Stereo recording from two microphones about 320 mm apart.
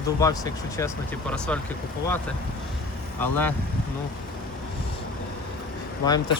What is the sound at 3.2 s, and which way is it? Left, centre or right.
Speech, centre.